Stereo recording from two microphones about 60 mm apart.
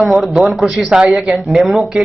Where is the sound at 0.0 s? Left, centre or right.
Centre.